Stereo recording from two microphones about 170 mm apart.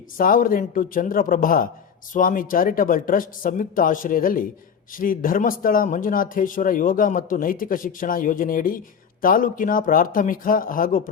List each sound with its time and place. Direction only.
0.2 s a man's voice: 55° left (ahead or behind)